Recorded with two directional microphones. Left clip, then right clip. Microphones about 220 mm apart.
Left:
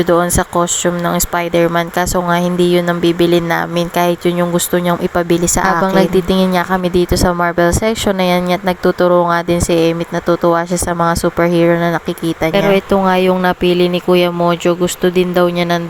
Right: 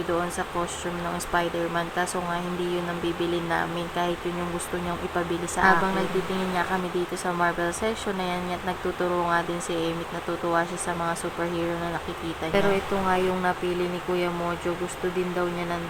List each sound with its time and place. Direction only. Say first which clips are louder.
0.1 s speech: left 12 dB; 40° left (ahead or behind)
7.1 s speech: left 11 dB; 40° left (ahead or behind)